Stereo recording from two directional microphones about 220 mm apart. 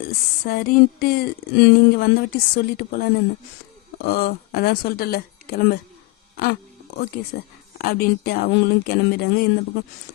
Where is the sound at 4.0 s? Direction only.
45° left (ahead or behind).